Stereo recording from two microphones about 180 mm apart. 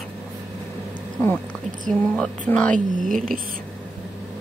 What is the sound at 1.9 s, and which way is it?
Speech, 5° left (ahead or behind).